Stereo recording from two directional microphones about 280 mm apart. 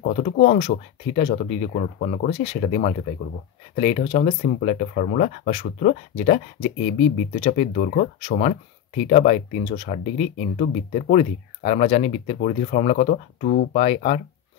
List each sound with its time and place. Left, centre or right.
0.0 s speech: left